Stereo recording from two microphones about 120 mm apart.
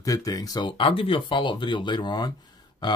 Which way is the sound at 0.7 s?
45° left (ahead or behind).